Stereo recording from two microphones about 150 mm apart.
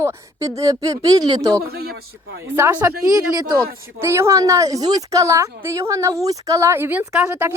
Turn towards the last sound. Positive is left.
turn(degrees=-15)  # may be behind; listen again after turning